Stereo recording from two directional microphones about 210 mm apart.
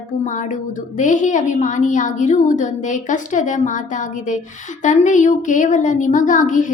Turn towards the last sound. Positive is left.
turn(degrees=35)  # may be behind; listen again after turning